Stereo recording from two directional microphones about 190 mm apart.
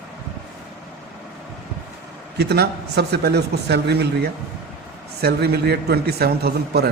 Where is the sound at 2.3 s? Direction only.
60° right (ahead or behind).